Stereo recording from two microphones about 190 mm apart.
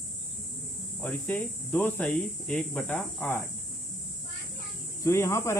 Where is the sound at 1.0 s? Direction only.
10° left (ahead or behind).